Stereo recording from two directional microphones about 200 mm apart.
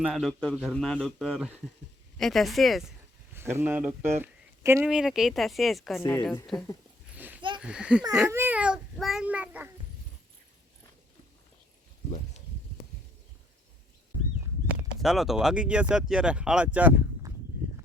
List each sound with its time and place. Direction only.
0.0 s speech: centre (ahead or behind)
3.3 s speech: 10° right (ahead or behind)
6.0 s a woman's voice: 15° left (ahead or behind)
6.2 s speech: centre (ahead or behind)
7.2 s a sound: 10° right (ahead or behind)
7.6 s a child's voice: 5° right (ahead or behind)
15.0 s speech: centre (ahead or behind)